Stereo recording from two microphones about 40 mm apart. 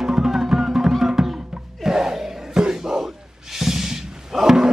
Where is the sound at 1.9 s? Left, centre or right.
Centre.